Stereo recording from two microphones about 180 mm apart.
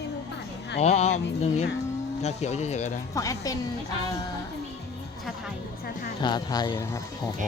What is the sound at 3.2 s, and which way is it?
Speech, 20° left (ahead or behind).